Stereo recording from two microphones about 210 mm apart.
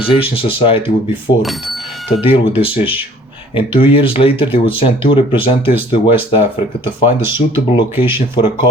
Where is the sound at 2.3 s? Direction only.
25° left (ahead or behind).